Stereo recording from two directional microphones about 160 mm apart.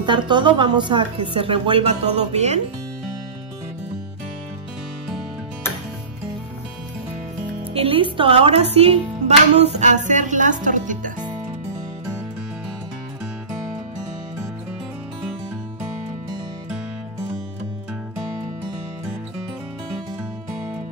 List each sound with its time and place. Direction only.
0.0 s speech: 30° right (ahead or behind)
7.7 s speech: 35° right (ahead or behind)
9.8 s speech: 50° right (ahead or behind)